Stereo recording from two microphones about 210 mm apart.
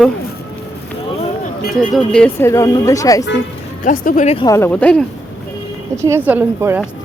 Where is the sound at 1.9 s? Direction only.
5° left (ahead or behind).